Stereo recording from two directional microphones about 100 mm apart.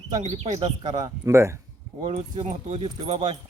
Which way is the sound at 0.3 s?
90° right.